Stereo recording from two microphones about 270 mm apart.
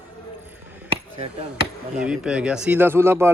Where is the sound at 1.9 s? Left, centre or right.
Centre.